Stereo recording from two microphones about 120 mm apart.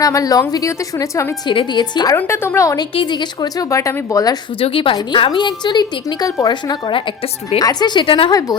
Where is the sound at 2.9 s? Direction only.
40° left (ahead or behind).